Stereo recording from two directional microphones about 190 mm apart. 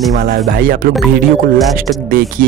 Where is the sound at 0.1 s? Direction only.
45° right (ahead or behind).